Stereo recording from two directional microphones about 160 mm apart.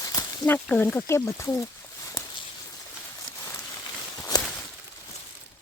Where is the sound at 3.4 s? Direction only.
15° left (ahead or behind).